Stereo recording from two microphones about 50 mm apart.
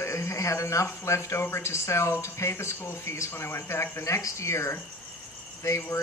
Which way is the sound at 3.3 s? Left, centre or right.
Left.